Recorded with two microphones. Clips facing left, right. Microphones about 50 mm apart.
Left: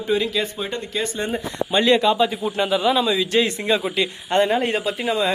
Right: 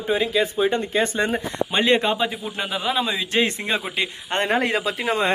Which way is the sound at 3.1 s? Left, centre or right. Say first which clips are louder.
Left 3 dB; right.